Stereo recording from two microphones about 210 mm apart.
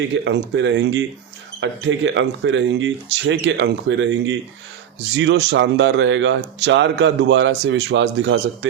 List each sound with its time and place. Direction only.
0.1 s speech: 60° right (ahead or behind)